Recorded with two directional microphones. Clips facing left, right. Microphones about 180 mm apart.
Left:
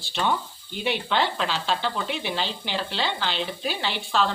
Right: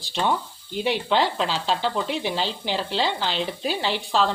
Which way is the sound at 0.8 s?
35° right (ahead or behind).